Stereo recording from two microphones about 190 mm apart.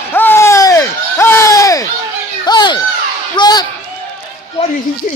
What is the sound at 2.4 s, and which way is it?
Children playing, 20° left (ahead or behind).